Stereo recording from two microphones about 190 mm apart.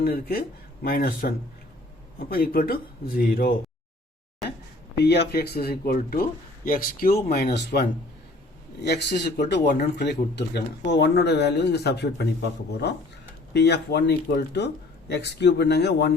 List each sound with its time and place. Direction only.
0.0 s speech: 50° left (ahead or behind)
4.9 s speech: 60° left (ahead or behind)
13.5 s speech: 60° left (ahead or behind)